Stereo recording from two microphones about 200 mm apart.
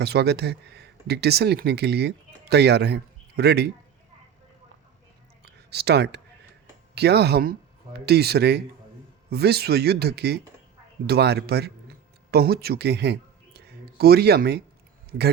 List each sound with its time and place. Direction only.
0.0 s speech: 55° right (ahead or behind)
5.4 s a sound: 55° right (ahead or behind)
6.9 s speech: 55° right (ahead or behind)